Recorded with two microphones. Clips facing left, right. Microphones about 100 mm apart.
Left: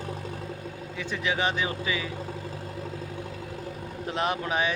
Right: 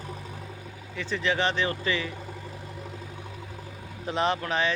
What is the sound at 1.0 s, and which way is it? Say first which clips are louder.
Speech: right 2 dB; 10° left (ahead or behind).